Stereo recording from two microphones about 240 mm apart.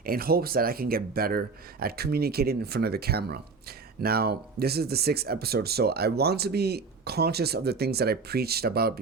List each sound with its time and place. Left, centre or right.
0.0 s speech: right